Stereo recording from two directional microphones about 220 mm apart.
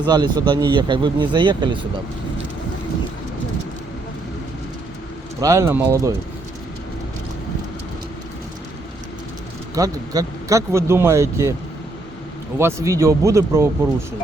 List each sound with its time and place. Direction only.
0.1 s speech: 20° right (ahead or behind)
5.4 s speech: 15° right (ahead or behind)
9.7 s speech: 15° right (ahead or behind)
12.5 s speech: 10° right (ahead or behind)